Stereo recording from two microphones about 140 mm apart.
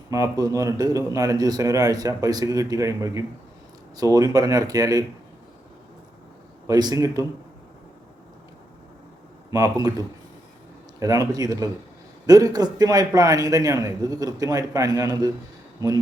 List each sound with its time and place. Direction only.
0.1 s speech: 25° right (ahead or behind)
6.7 s speech: 25° right (ahead or behind)
9.5 s speech: 25° right (ahead or behind)
11.0 s speech: 25° right (ahead or behind)